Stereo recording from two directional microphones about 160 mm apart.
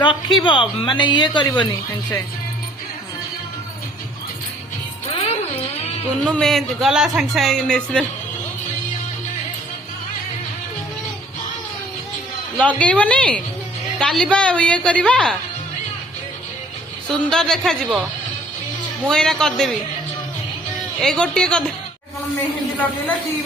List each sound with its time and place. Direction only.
0.0 s a woman's voice: 30° left (ahead or behind)
5.1 s music: 30° left (ahead or behind)
6.2 s speech: 5° left (ahead or behind)
12.5 s a woman's voice: 10° left (ahead or behind)
17.2 s speech: 5° left (ahead or behind)
19.0 s speech: 5° left (ahead or behind)
21.0 s speech: 5° left (ahead or behind)